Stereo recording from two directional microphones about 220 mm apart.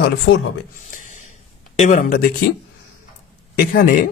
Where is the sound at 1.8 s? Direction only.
35° left (ahead or behind).